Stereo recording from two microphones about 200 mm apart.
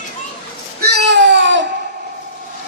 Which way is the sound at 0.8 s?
55° right (ahead or behind).